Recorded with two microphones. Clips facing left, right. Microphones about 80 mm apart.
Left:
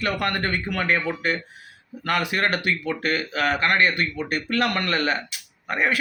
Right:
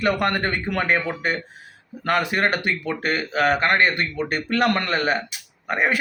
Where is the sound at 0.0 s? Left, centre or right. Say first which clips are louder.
Right 4 dB; right.